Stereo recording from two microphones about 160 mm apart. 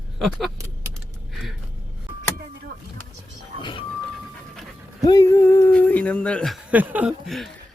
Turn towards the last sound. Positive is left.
turn(degrees=0)  # may be behind; listen again after turning